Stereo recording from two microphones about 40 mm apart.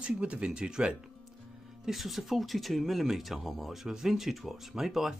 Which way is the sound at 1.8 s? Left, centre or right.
Centre.